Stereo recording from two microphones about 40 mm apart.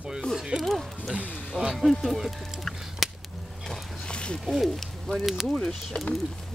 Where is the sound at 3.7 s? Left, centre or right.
Left.